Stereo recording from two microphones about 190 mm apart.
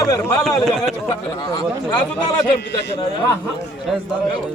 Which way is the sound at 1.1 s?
20° left (ahead or behind).